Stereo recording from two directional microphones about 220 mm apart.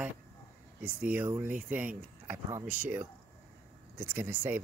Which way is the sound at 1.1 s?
10° right (ahead or behind).